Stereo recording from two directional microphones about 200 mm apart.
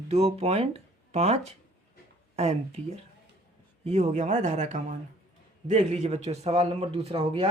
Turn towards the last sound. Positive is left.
turn(degrees=-30)  # may be behind; listen again after turning